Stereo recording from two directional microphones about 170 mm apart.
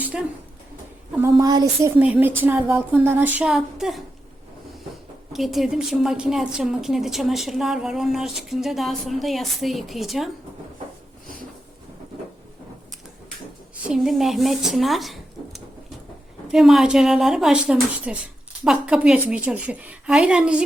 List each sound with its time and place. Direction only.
1.2 s a woman's voice: 20° right (ahead or behind)
1.8 s speech: 5° right (ahead or behind)
5.3 s a woman's voice: centre (ahead or behind)
13.8 s a woman's voice: 5° right (ahead or behind)